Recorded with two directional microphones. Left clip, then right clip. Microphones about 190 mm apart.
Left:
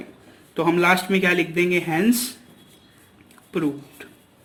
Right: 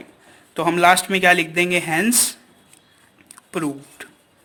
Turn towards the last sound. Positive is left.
turn(degrees=-45)  # may be behind; listen again after turning